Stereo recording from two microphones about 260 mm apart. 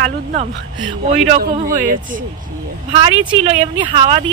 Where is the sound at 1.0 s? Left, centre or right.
Right.